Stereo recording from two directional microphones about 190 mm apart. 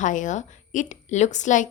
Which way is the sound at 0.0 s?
40° left (ahead or behind).